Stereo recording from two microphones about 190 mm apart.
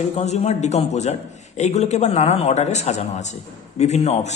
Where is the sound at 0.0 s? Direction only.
35° left (ahead or behind).